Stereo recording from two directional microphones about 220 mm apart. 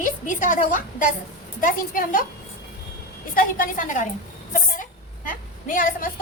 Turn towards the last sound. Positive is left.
turn(degrees=40)  # may be behind; listen again after turning